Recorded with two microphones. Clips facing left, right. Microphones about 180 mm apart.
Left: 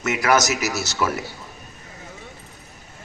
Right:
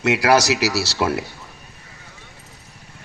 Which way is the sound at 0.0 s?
35° right (ahead or behind).